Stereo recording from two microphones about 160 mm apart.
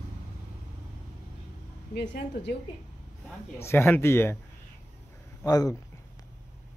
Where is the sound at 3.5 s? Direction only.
15° left (ahead or behind).